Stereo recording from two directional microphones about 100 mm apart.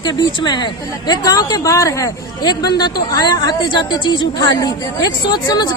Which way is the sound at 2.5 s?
45° left (ahead or behind).